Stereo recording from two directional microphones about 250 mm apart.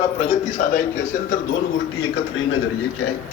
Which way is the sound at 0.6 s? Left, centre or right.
Left.